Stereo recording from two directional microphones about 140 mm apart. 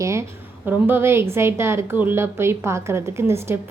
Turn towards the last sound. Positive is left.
turn(degrees=-20)  # may be behind; listen again after turning